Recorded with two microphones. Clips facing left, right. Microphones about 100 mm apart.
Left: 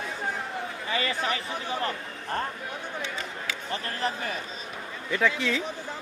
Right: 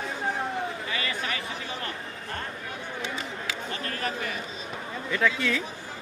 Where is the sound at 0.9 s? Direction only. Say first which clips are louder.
Left 3 dB; 30° left (ahead or behind).